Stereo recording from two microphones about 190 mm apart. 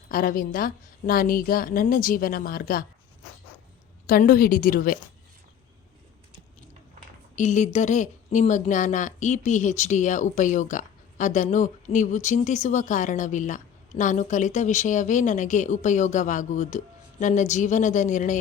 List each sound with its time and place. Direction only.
0.1 s a woman's voice: 50° left (ahead or behind)
4.0 s a woman's voice: 50° left (ahead or behind)
7.3 s speech: 40° left (ahead or behind)